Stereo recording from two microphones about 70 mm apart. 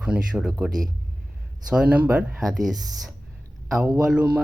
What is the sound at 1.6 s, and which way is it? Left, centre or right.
Speech, centre.